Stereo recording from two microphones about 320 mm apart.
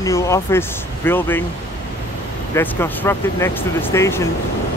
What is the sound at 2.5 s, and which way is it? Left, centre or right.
Speech, centre.